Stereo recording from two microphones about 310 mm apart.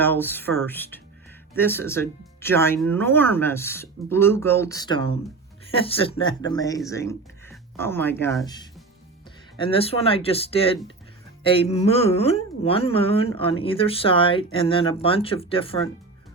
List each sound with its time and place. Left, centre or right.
0.0 s speech: centre